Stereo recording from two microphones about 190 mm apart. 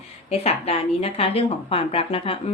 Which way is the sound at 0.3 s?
30° left (ahead or behind).